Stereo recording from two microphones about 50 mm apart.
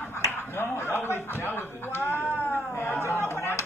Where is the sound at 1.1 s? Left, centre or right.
Left.